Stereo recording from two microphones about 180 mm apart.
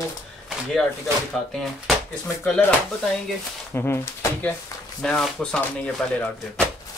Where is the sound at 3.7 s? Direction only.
15° left (ahead or behind).